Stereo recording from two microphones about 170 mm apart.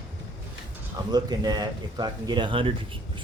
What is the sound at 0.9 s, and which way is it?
Speech, 25° right (ahead or behind).